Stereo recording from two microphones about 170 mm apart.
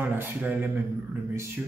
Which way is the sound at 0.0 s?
10° right (ahead or behind).